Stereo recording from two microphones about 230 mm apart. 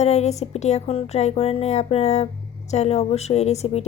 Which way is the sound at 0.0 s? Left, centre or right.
Left.